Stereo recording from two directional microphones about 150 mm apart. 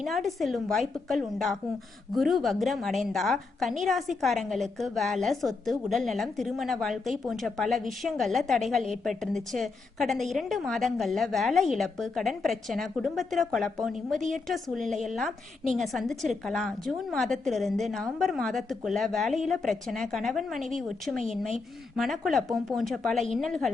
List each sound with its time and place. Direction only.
0.0 s a woman's voice: centre (ahead or behind)
14.2 s a woman's voice: 55° right (ahead or behind)
14.4 s a woman's voice: centre (ahead or behind)